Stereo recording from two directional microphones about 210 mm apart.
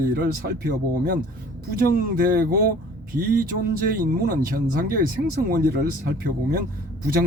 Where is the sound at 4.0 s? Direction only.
45° right (ahead or behind).